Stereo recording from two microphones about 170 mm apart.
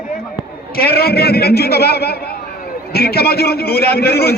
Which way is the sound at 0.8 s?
65° left (ahead or behind).